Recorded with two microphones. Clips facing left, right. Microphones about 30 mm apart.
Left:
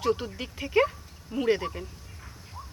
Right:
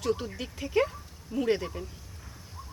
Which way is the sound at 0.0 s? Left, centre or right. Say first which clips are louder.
Left 3 dB; centre.